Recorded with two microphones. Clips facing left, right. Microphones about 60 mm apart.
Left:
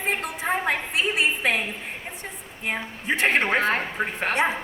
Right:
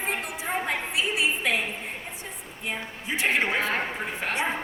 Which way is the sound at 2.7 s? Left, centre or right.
Left.